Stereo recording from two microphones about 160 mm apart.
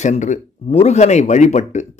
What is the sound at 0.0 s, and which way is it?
Speech, 50° left (ahead or behind).